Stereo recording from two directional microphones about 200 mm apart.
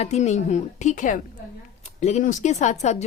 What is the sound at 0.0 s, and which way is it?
A woman's voice, 35° left (ahead or behind).